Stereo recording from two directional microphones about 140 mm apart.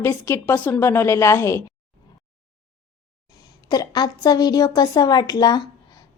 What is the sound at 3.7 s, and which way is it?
A woman's voice, 30° left (ahead or behind).